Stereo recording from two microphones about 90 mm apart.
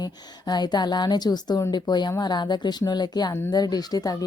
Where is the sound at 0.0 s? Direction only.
50° left (ahead or behind).